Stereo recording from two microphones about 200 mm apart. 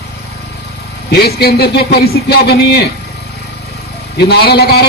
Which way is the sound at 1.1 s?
50° left (ahead or behind).